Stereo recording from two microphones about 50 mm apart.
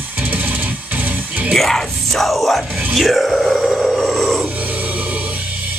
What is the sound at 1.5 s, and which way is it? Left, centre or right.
Music, centre.